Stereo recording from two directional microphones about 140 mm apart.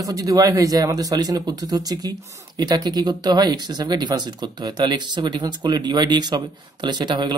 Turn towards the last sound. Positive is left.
turn(degrees=-30)  # may be behind; listen again after turning